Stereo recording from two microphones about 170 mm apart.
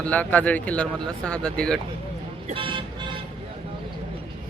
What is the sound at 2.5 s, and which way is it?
Speech, 30° right (ahead or behind).